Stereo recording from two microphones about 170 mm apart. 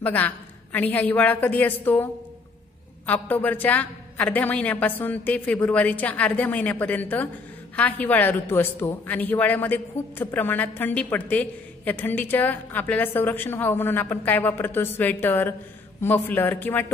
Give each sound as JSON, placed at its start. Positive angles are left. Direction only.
{"t": 0.0, "sound": "a man's voice", "side_deg": 10}
{"t": 3.1, "sound": "a man's voice", "side_deg": 10}